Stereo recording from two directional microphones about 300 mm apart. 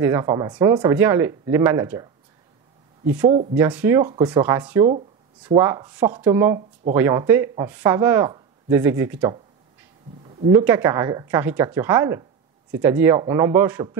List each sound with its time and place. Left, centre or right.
0.0 s speech: centre
3.2 s speech: centre
10.2 s a sound: centre
10.6 s speech: centre